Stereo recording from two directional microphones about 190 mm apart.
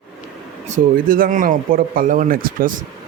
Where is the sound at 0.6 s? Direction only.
45° right (ahead or behind).